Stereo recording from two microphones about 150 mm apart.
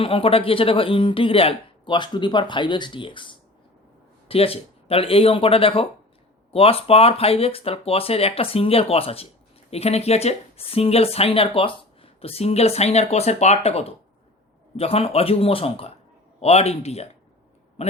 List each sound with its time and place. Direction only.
0.0 s speech: 40° left (ahead or behind)